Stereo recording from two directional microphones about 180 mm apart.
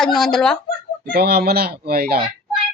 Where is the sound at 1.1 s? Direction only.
60° right (ahead or behind).